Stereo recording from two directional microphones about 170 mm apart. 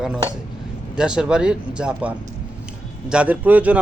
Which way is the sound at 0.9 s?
5° right (ahead or behind).